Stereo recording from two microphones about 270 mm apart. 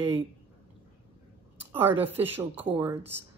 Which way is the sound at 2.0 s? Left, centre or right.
Centre.